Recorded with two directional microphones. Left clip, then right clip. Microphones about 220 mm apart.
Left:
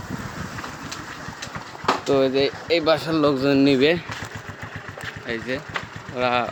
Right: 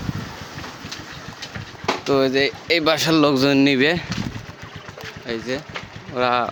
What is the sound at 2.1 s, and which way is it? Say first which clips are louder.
Speech: right 3 dB; 40° right (ahead or behind).